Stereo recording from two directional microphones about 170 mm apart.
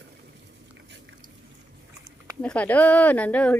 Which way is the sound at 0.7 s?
90° right.